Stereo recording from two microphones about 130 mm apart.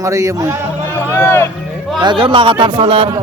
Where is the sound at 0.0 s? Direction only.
25° right (ahead or behind).